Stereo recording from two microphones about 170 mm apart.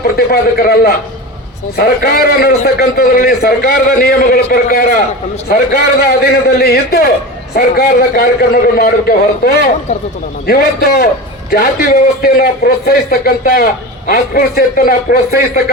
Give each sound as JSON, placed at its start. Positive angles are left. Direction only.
{"t": 0.2, "sound": "a man's voice", "side_deg": 65}